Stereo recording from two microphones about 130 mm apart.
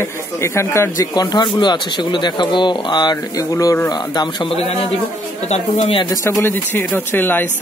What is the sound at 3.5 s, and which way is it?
Speech, 25° left (ahead or behind).